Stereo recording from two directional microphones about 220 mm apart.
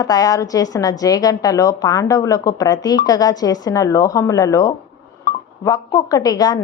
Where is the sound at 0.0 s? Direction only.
15° left (ahead or behind).